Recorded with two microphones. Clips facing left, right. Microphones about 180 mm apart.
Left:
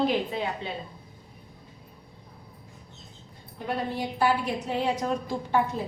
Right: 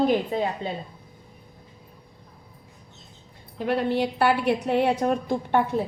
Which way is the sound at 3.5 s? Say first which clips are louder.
Right 7 dB; 70° right (ahead or behind).